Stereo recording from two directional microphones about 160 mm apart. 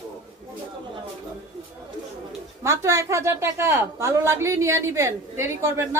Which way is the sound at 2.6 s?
20° right (ahead or behind).